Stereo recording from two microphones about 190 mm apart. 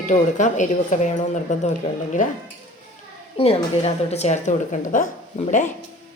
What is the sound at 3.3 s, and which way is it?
A woman's voice, 30° left (ahead or behind).